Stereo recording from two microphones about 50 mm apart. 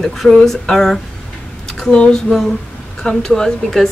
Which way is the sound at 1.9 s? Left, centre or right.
Left.